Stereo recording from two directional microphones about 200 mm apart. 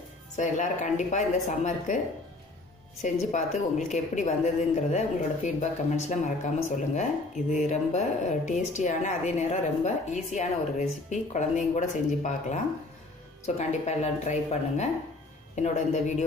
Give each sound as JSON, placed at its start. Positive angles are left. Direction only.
{"t": 0.4, "sound": "a woman's voice", "side_deg": 40}
{"t": 3.0, "sound": "a woman's voice", "side_deg": 35}
{"t": 7.5, "sound": "a woman's voice", "side_deg": 35}
{"t": 13.6, "sound": "a woman's voice", "side_deg": 35}